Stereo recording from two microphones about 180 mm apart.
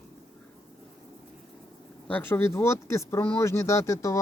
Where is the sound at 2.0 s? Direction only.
10° left (ahead or behind).